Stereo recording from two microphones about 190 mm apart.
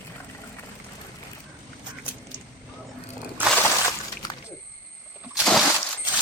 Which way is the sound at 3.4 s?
10° right (ahead or behind).